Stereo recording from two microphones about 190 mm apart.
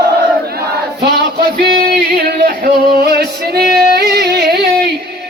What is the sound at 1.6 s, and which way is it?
Music, 45° right (ahead or behind).